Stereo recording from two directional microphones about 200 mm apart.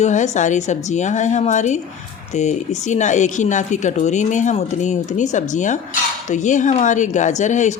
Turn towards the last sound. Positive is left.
turn(degrees=35)  # may be behind; listen again after turning